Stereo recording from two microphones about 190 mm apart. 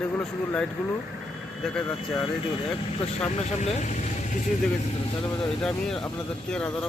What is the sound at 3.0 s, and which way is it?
Speech, 35° left (ahead or behind).